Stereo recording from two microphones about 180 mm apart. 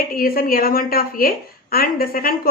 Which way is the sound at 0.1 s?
55° left (ahead or behind).